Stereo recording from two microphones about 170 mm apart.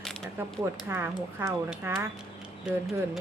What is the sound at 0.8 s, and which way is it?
A woman's voice, 15° right (ahead or behind).